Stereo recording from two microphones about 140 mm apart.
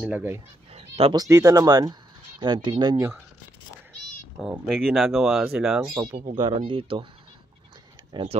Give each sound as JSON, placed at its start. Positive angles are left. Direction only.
{"t": 0.0, "sound": "speech", "side_deg": -10}
{"t": 0.7, "sound": "a sound", "side_deg": -50}
{"t": 1.1, "sound": "speech", "side_deg": -25}
{"t": 4.4, "sound": "speech", "side_deg": 0}
{"t": 6.3, "sound": "speech", "side_deg": -35}
{"t": 8.1, "sound": "speech", "side_deg": -35}